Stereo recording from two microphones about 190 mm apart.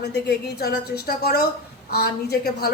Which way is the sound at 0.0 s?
60° left (ahead or behind).